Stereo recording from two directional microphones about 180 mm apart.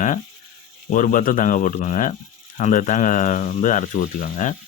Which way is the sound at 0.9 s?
45° left (ahead or behind).